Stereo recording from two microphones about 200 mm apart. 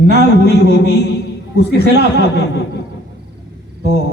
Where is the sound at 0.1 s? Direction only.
55° left (ahead or behind).